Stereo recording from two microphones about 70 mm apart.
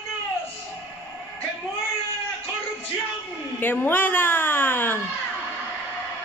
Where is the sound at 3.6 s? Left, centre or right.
Left.